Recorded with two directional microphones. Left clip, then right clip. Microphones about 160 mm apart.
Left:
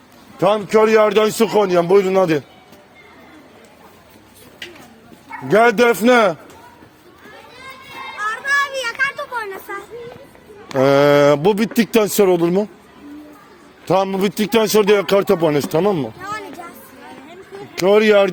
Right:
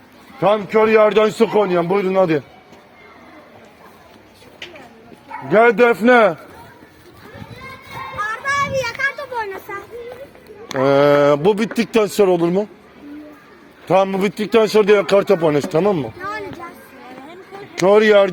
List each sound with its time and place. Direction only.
0.3 s speech: 65° left (ahead or behind)
5.5 s speech: 70° left (ahead or behind); by 6.3 s 90° left
8.3 s children playing: 10° right (ahead or behind)
9.7 s child singing: 5° right (ahead or behind)
10.8 s speech: 90° left
13.8 s speech: 65° left (ahead or behind)
16.2 s children playing: 25° left (ahead or behind)
17.8 s speech: 70° left (ahead or behind)